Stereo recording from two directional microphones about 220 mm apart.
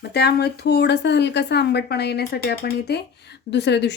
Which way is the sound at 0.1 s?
45° left (ahead or behind).